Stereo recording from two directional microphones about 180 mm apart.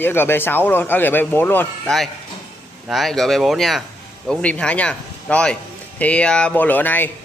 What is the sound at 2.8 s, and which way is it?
A man's voice, centre (ahead or behind).